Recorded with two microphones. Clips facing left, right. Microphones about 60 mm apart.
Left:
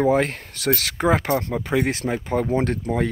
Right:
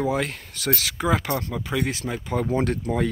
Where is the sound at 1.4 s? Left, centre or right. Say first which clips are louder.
Left 4 dB; left.